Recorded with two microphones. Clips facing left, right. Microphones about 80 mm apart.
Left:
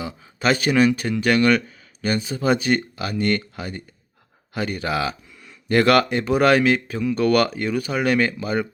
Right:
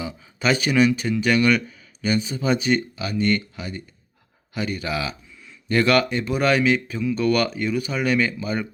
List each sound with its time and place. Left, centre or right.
0.0 s speech: left